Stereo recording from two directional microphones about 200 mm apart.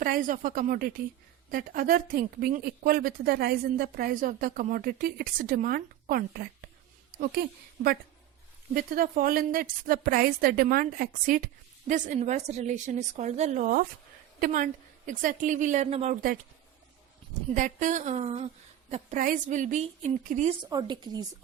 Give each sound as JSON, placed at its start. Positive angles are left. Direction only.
{"t": 0.0, "sound": "a woman's voice", "side_deg": -45}
{"t": 8.7, "sound": "a woman's voice", "side_deg": -45}
{"t": 17.5, "sound": "a woman's voice", "side_deg": -40}
{"t": 20.6, "sound": "speech", "side_deg": -20}